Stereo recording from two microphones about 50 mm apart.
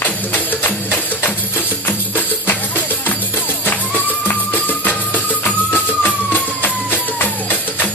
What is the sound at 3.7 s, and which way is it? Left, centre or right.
Music, left.